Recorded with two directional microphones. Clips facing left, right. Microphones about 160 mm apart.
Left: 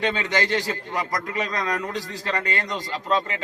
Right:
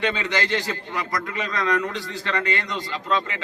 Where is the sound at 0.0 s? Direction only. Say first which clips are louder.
Left 1 dB; 40° left (ahead or behind).